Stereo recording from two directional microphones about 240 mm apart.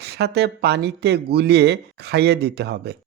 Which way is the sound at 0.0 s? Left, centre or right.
Right.